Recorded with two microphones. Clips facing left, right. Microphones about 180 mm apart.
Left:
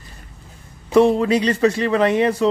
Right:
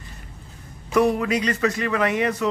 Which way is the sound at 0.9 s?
25° left (ahead or behind).